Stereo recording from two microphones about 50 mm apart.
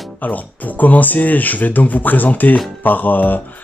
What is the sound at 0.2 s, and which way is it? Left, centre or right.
Speech, left.